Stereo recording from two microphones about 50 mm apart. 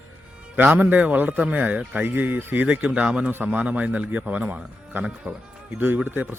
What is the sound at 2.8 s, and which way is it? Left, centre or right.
A man's voice, right.